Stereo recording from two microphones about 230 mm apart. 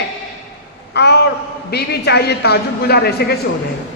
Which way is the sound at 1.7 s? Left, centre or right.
Left.